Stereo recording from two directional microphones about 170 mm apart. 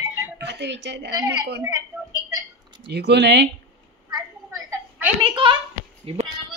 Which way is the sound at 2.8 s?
85° right.